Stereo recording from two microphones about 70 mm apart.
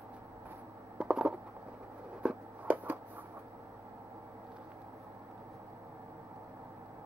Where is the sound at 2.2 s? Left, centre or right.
Right.